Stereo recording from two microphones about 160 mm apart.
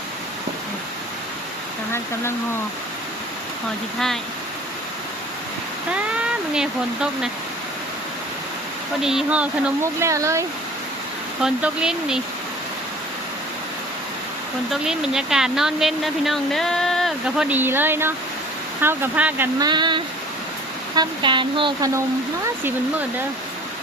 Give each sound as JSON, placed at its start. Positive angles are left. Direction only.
{"t": 5.9, "sound": "speech", "side_deg": -5}
{"t": 9.0, "sound": "speech", "side_deg": -5}
{"t": 11.4, "sound": "a woman's voice", "side_deg": -5}
{"t": 14.7, "sound": "a woman's voice", "side_deg": -5}
{"t": 19.5, "sound": "speech", "side_deg": -25}